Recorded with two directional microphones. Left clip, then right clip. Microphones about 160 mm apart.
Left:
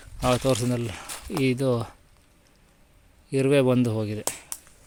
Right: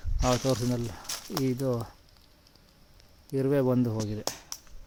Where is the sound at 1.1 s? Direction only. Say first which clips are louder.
Left 4 dB; 90° left.